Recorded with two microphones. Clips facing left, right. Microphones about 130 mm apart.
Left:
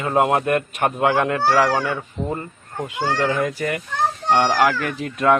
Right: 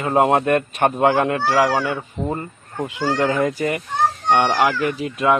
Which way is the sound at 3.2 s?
25° right (ahead or behind).